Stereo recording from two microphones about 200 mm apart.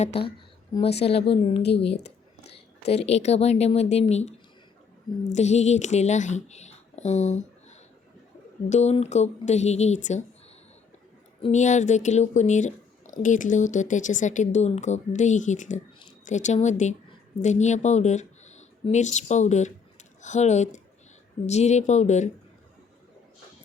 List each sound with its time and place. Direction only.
0.0 s speech: 30° left (ahead or behind)
2.0 s a sound: 55° left (ahead or behind)
2.9 s a woman's voice: 30° left (ahead or behind)
11.4 s speech: 35° left (ahead or behind)